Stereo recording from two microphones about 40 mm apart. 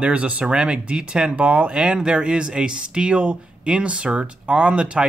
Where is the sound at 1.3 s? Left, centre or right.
Right.